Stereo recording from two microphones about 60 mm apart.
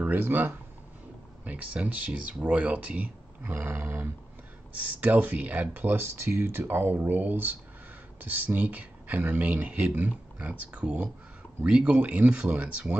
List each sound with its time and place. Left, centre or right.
0.0 s speech: right
1.4 s speech: right